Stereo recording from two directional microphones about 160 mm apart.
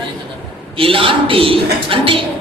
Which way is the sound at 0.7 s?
35° right (ahead or behind).